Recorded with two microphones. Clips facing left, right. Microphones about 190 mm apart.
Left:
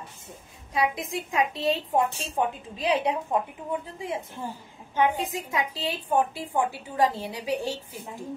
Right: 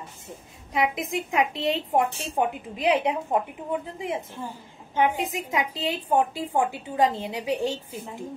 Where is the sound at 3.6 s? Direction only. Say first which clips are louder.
Right 2 dB; 30° right (ahead or behind).